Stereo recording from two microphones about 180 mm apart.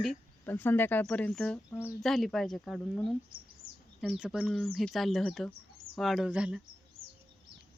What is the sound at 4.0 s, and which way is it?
Speech, 5° right (ahead or behind).